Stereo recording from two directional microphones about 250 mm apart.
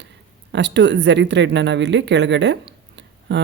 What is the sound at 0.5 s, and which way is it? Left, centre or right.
Speech, right.